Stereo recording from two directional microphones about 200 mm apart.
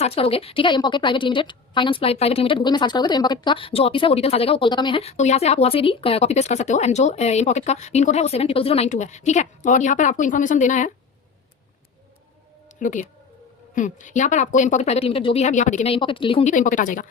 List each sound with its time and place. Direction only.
0.0 s a woman's voice: 30° left (ahead or behind)
12.8 s a woman's voice: 40° left (ahead or behind)